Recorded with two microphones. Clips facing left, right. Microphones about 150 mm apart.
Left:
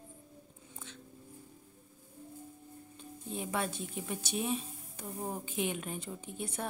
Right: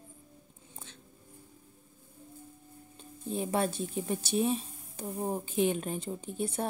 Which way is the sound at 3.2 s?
35° right (ahead or behind).